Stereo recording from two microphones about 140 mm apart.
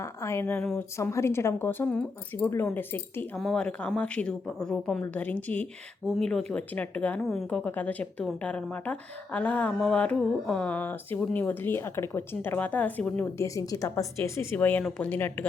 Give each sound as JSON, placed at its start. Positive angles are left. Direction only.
{"t": 0.0, "sound": "a woman's voice", "side_deg": 20}
{"t": 3.3, "sound": "a woman's voice", "side_deg": 0}